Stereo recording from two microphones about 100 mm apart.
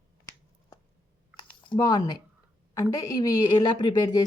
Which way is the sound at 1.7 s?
40° left (ahead or behind).